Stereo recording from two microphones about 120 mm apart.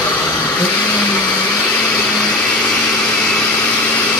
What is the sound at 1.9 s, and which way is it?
Vacuum cleaner, 5° left (ahead or behind).